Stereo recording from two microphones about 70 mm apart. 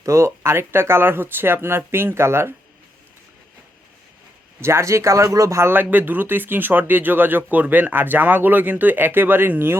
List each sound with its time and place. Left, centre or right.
0.0 s speech: right
4.6 s speech: right
5.7 s speech: right